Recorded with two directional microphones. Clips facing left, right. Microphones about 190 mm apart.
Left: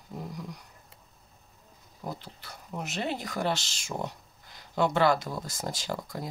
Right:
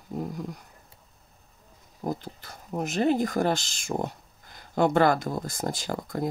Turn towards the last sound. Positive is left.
turn(degrees=-55)  # may be behind; listen again after turning